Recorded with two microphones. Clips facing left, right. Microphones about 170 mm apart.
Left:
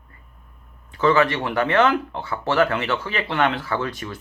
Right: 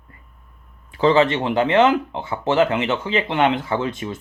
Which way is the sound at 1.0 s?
20° right (ahead or behind).